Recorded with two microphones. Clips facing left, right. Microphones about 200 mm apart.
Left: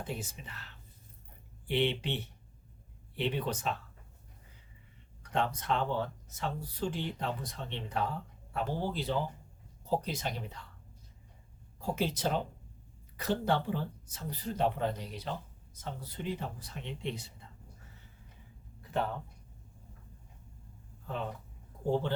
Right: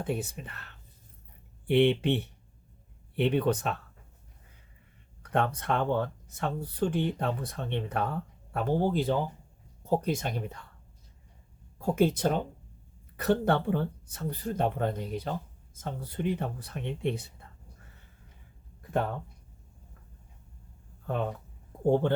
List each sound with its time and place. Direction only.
0.0 s speech: 60° right (ahead or behind)
5.3 s speech: 60° right (ahead or behind)
11.8 s speech: 55° right (ahead or behind)
18.8 s a sound: 50° right (ahead or behind)